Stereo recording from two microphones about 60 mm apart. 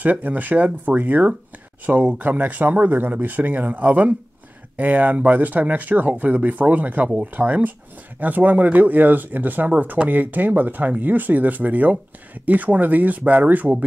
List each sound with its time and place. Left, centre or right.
0.0 s speech: right